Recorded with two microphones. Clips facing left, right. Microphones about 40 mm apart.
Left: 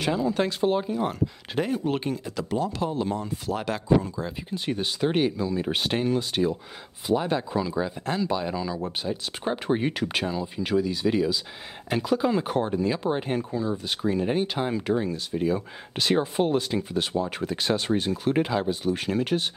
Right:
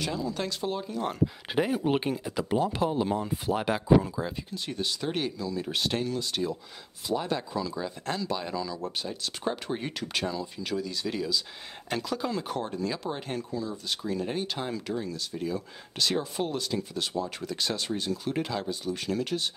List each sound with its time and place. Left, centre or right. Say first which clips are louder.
0.0 s speech: left 7 dB; left
1.2 s speech: even; centre
4.5 s speech: left 4 dB; left